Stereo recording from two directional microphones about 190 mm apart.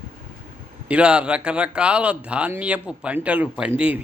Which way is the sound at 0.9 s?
5° right (ahead or behind).